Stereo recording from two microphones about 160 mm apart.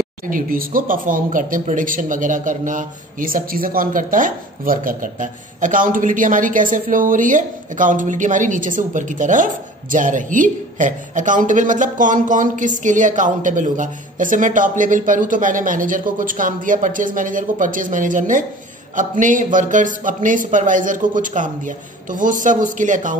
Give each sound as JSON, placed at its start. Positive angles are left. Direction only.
{"t": 0.3, "sound": "speech", "side_deg": -60}